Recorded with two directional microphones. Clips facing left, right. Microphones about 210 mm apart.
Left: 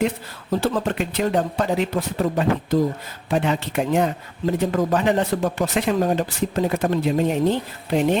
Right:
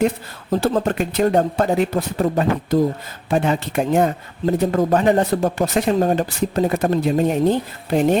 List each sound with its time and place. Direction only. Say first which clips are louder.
0.6 s speech: right 4 dB; 45° right (ahead or behind)